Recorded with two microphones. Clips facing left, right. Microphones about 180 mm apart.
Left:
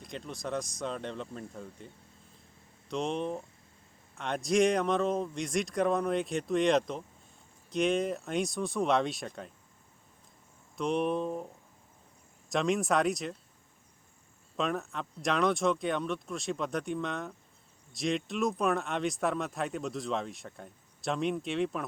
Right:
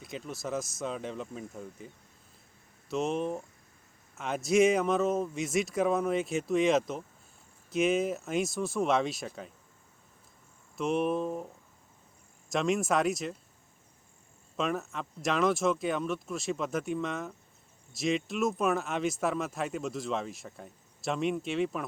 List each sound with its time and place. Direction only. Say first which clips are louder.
0.0 s speech: right 1 dB; 5° right (ahead or behind)
2.9 s speech: right 2 dB; 5° right (ahead or behind)
10.8 s speech: right 1 dB; centre (ahead or behind)
12.5 s speech: even; centre (ahead or behind)
14.5 s speech: even; centre (ahead or behind)